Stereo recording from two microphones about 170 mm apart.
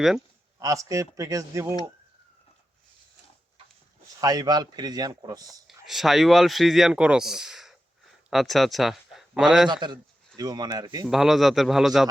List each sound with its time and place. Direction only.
0.6 s speech: 20° right (ahead or behind)
4.2 s speech: 20° right (ahead or behind)
5.6 s speech: centre (ahead or behind)
9.8 s speech: 25° right (ahead or behind)
11.1 s a man's voice: centre (ahead or behind)